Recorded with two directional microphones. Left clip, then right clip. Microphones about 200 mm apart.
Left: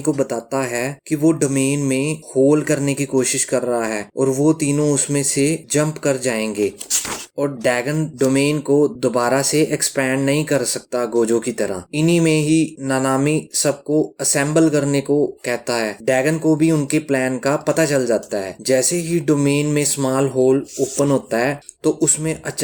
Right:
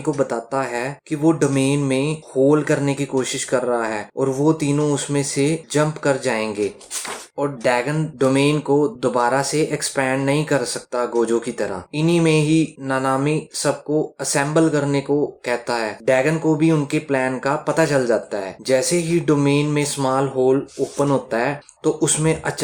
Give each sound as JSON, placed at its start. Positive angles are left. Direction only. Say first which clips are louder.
{"t": 0.0, "sound": "speech", "louder": "left 1 dB", "side_deg": 35}